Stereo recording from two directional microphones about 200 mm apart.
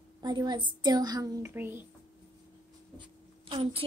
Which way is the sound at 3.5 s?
25° right (ahead or behind).